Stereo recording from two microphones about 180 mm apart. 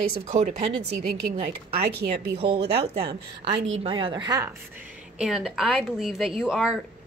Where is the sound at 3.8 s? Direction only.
30° right (ahead or behind).